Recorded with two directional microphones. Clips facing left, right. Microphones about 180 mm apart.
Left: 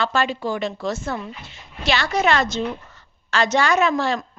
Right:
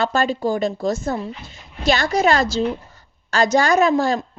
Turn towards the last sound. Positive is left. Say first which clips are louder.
# right 3 dB
turn(degrees=-40)  # may be behind; listen again after turning